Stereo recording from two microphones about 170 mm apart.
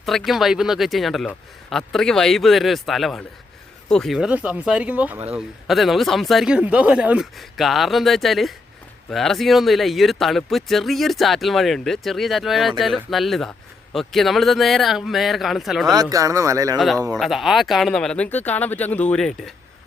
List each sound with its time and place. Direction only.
0.0 s speech: centre (ahead or behind)
15.9 s speech: 20° right (ahead or behind)
16.7 s speech: centre (ahead or behind)